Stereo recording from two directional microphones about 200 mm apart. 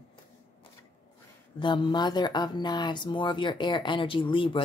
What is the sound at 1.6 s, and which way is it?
Speech, 25° left (ahead or behind).